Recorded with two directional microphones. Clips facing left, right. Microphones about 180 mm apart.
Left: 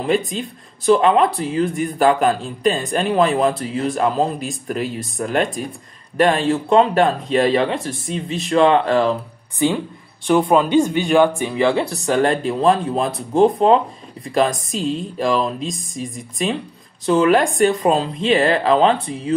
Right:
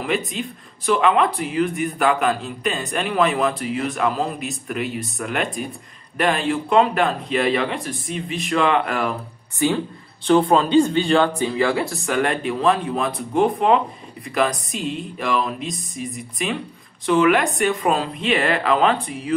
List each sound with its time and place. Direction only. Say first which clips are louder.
0.0 s a man's voice: left 4 dB; 30° left (ahead or behind)
10.2 s speech: left 1 dB; 10° left (ahead or behind)
12.1 s a man's voice: left 5 dB; 30° left (ahead or behind)